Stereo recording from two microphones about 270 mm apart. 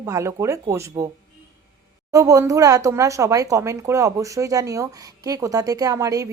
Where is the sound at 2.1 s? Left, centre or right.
Centre.